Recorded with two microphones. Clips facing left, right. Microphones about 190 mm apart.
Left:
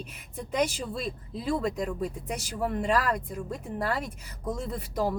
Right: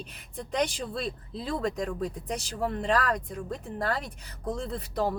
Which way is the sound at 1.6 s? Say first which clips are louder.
Even; 5° left (ahead or behind).